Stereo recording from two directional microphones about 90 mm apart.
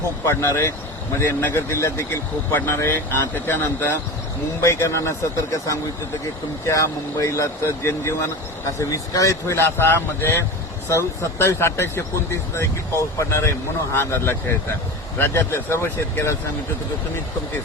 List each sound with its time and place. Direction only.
0.3 s speech: 30° left (ahead or behind)